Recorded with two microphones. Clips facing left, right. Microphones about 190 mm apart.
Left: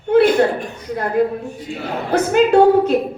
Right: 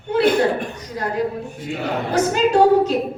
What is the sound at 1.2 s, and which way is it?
A woman's voice, 55° left (ahead or behind).